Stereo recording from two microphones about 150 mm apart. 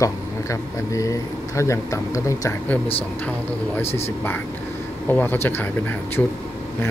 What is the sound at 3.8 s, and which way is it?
Speech, 45° left (ahead or behind).